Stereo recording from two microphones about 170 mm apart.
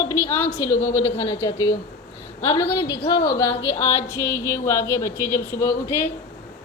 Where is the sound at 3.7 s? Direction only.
40° left (ahead or behind).